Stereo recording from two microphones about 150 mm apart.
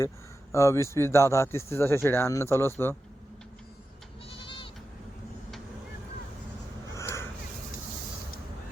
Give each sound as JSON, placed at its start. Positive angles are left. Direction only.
{"t": 0.5, "sound": "speech", "side_deg": 20}
{"t": 4.3, "sound": "goat", "side_deg": 35}
{"t": 6.9, "sound": "a sound", "side_deg": 20}